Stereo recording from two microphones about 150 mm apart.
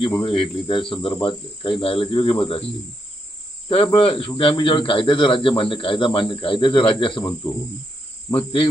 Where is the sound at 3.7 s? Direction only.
40° left (ahead or behind).